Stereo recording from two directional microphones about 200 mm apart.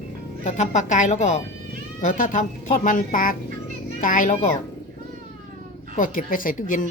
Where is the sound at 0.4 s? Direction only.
35° left (ahead or behind).